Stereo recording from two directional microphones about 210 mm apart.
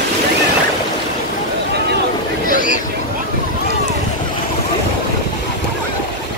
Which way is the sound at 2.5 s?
40° left (ahead or behind).